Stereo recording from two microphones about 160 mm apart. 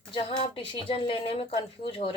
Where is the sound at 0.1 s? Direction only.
35° left (ahead or behind).